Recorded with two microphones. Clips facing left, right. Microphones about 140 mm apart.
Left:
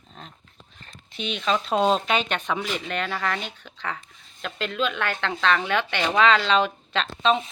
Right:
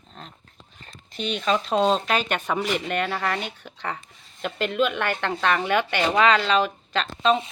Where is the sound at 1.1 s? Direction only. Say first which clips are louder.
Right 1 dB; centre (ahead or behind).